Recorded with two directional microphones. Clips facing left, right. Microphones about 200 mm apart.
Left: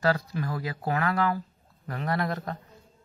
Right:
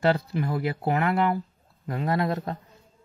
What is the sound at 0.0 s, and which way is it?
Speech, 25° right (ahead or behind).